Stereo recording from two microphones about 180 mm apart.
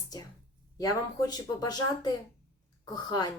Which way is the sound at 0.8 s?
20° left (ahead or behind).